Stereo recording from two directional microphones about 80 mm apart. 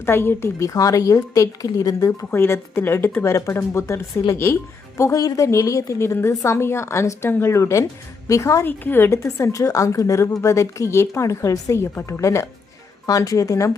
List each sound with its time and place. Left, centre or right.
0.0 s a woman's voice: left
0.6 s a woman's voice: left
3.3 s a woman's voice: left
8.6 s a woman's voice: left
9.0 s a woman's voice: left